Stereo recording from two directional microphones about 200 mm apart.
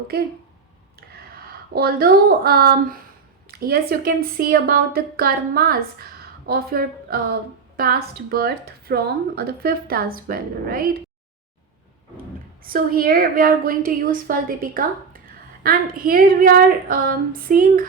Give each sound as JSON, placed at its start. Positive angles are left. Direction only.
{"t": 0.1, "sound": "speech", "side_deg": -50}
{"t": 1.7, "sound": "speech", "side_deg": -50}
{"t": 12.6, "sound": "speech", "side_deg": -45}